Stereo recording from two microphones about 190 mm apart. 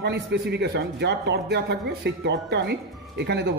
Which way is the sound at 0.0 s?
65° right (ahead or behind).